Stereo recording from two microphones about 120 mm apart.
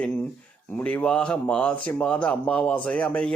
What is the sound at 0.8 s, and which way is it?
A man's voice, 15° left (ahead or behind).